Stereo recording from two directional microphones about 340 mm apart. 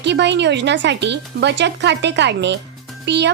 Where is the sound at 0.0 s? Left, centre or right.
Right.